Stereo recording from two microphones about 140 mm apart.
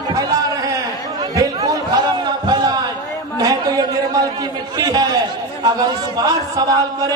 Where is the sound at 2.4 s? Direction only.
30° right (ahead or behind).